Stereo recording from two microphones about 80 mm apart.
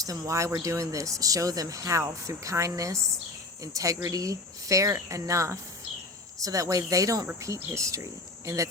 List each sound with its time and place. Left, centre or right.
0.0 s speech: right